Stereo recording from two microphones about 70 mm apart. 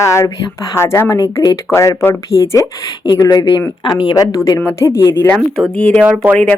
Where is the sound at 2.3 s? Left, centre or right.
Left.